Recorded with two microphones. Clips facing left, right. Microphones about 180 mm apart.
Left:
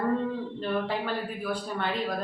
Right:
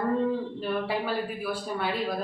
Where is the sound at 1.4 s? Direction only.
5° right (ahead or behind).